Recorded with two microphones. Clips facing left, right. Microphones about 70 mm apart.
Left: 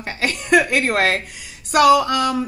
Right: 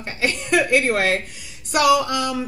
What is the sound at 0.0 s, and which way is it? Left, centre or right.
A woman's voice, left.